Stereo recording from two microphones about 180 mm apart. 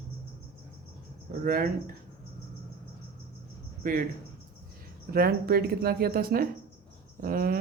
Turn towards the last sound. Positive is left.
turn(degrees=-55)  # may be behind; listen again after turning